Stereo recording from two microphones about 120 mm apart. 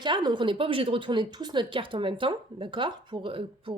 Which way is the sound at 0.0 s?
40° right (ahead or behind).